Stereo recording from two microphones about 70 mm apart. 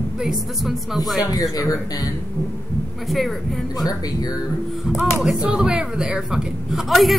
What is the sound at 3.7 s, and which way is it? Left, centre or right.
Speech, left.